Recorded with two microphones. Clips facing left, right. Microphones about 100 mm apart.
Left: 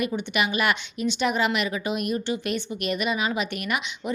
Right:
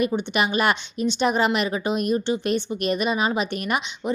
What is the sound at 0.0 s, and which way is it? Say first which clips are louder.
A woman's voice: right 3 dB; 35° right (ahead or behind).